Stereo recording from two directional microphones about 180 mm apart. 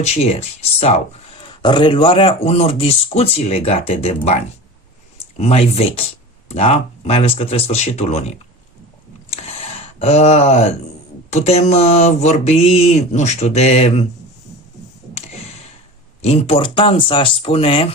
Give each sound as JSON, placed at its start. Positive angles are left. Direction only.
{"t": 0.0, "sound": "speech", "side_deg": 35}
{"t": 5.4, "sound": "speech", "side_deg": 35}
{"t": 9.3, "sound": "a sound", "side_deg": 35}
{"t": 11.3, "sound": "speech", "side_deg": 35}
{"t": 15.1, "sound": "a sound", "side_deg": 35}
{"t": 16.2, "sound": "speech", "side_deg": 35}